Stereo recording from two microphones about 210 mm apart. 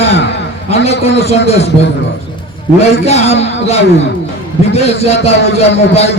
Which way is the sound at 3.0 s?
30° left (ahead or behind).